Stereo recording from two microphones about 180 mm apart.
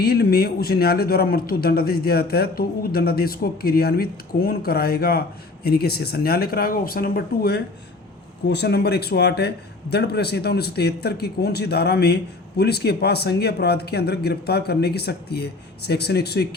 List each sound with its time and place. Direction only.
0.0 s a man's voice: 60° left (ahead or behind)